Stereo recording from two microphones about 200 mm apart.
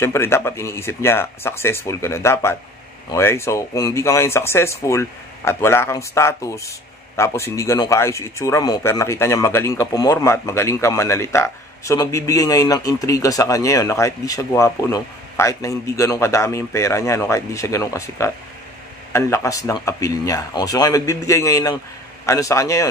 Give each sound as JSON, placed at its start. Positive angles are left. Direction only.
{"t": 0.0, "sound": "speech", "side_deg": 10}